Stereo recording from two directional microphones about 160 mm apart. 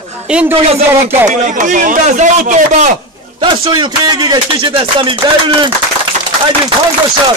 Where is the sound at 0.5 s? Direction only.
40° right (ahead or behind).